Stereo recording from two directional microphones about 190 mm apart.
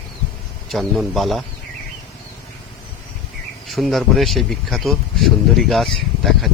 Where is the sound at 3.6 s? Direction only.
Centre (ahead or behind).